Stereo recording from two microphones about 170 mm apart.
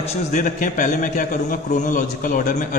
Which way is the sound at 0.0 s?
40° left (ahead or behind).